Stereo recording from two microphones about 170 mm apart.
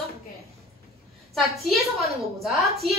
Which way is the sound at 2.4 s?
Centre (ahead or behind).